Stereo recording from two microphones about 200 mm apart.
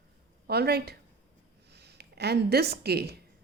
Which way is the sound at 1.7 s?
55° right (ahead or behind).